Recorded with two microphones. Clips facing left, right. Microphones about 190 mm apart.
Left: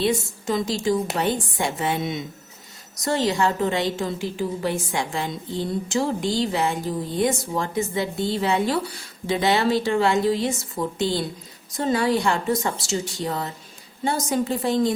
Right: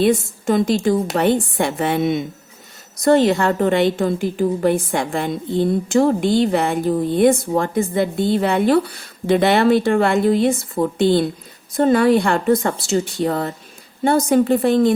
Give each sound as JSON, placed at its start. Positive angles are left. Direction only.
{"t": 0.0, "sound": "a woman's voice", "side_deg": -55}